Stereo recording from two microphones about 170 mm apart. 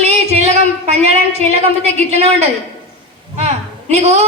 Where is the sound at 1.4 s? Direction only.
40° right (ahead or behind).